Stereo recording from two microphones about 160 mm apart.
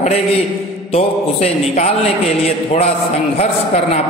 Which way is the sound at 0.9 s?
40° left (ahead or behind).